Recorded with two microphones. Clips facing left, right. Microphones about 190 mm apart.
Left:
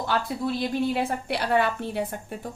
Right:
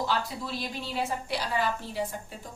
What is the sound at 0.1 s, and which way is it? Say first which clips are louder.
A woman's voice: left 5 dB; 55° left (ahead or behind).